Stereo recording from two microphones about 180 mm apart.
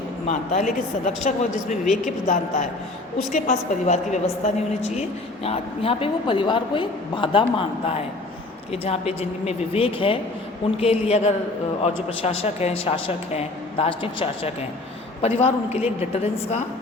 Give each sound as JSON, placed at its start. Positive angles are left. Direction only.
{"t": 0.3, "sound": "a woman's voice", "side_deg": 40}